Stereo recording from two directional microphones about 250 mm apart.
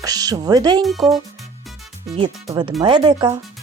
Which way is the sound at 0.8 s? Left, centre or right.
Centre.